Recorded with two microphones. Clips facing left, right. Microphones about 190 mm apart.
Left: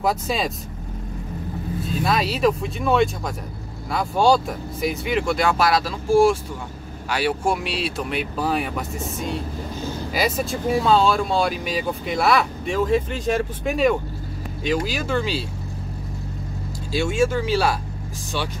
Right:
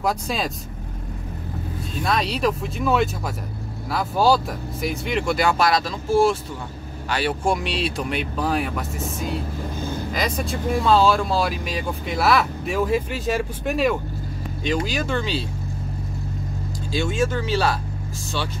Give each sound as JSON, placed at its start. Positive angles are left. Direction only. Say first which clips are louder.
{"t": 0.0, "sound": "speech", "louder": "left 2 dB", "side_deg": 0}
{"t": 2.0, "sound": "speech", "louder": "left 2 dB", "side_deg": 0}
{"t": 16.9, "sound": "speech", "louder": "left 2 dB", "side_deg": 10}